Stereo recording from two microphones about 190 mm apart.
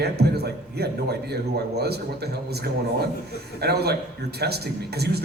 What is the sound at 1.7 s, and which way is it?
A man's voice, 60° right (ahead or behind).